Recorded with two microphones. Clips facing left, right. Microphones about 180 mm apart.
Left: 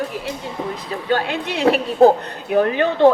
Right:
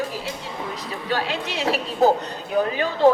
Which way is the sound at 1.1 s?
55° left (ahead or behind).